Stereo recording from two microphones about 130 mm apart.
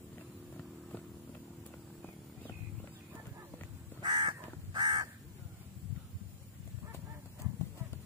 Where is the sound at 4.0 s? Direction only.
35° right (ahead or behind).